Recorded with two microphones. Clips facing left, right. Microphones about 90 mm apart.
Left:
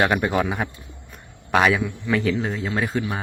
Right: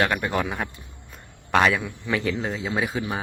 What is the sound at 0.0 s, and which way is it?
Speech, 15° left (ahead or behind).